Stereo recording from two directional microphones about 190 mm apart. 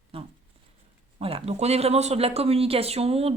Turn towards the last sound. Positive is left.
turn(degrees=-30)  # may be behind; listen again after turning